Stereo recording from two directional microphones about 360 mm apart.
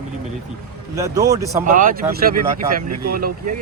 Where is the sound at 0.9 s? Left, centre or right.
Centre.